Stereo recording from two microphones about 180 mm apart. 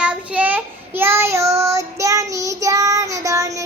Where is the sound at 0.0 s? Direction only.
10° right (ahead or behind).